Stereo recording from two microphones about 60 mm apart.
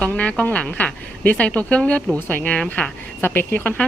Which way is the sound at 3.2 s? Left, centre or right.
Left.